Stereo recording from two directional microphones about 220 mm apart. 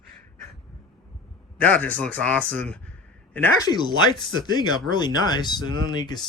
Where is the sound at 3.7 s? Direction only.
20° left (ahead or behind).